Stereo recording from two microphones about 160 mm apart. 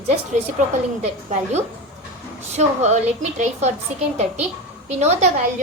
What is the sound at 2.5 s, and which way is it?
Speech, 45° right (ahead or behind).